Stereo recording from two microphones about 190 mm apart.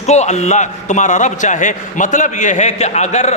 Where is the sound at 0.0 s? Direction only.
35° left (ahead or behind).